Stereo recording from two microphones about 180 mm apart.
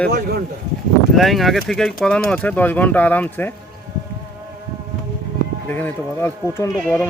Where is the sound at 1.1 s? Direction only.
Centre (ahead or behind).